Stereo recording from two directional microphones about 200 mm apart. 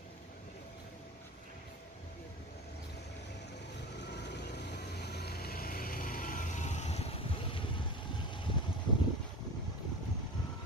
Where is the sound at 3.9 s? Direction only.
60° left (ahead or behind); by 7.8 s 25° left (ahead or behind).